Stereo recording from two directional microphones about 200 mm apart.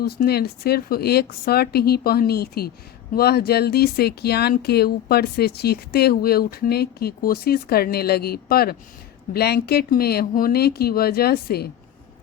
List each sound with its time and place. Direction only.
0.0 s speech: 50° left (ahead or behind)